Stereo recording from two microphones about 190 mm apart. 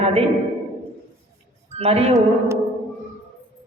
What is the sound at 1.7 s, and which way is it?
Music, 35° right (ahead or behind).